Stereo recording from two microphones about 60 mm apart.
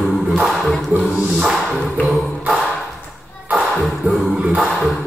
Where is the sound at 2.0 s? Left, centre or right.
Centre.